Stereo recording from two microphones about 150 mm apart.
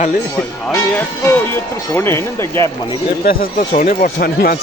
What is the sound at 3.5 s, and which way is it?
Speech, 40° left (ahead or behind).